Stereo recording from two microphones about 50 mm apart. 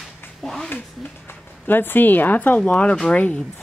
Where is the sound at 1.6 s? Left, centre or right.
Left.